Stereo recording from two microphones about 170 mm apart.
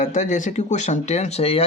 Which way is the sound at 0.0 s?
45° left (ahead or behind).